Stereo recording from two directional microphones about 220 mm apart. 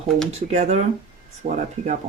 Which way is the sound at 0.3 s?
30° right (ahead or behind).